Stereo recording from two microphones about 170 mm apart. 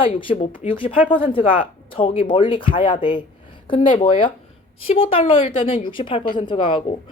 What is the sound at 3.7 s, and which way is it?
Speech, 30° left (ahead or behind).